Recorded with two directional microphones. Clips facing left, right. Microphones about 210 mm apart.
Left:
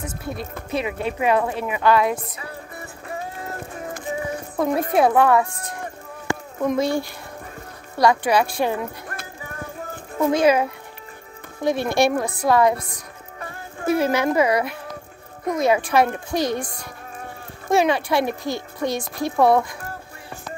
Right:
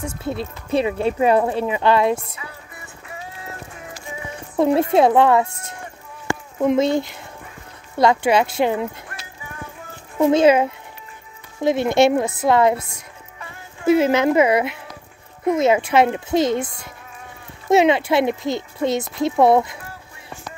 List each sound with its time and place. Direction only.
0.0 s speech: 25° right (ahead or behind)
2.3 s music: 40° left (ahead or behind)
3.9 s music: 55° left (ahead or behind)
4.6 s speech: 25° right (ahead or behind)
10.2 s speech: 25° right (ahead or behind)
13.4 s music: 50° left (ahead or behind)
13.8 s speech: 25° right (ahead or behind)